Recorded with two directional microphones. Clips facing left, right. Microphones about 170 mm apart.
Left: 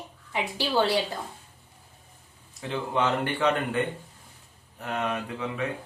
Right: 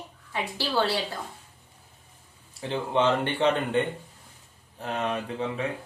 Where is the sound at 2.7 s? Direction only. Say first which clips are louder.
Right 2 dB; 30° right (ahead or behind).